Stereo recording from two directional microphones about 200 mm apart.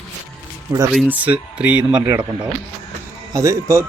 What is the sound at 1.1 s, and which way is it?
Speech, 5° right (ahead or behind).